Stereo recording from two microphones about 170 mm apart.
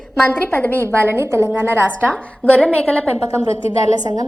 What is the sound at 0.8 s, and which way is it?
A woman's voice, 15° right (ahead or behind).